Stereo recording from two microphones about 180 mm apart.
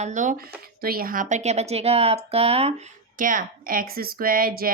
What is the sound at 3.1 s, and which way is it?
Speech, 50° right (ahead or behind).